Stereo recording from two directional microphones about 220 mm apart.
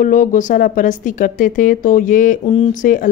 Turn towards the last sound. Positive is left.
turn(degrees=35)  # may be behind; listen again after turning